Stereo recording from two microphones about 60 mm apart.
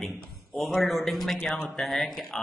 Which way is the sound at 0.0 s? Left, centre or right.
Centre.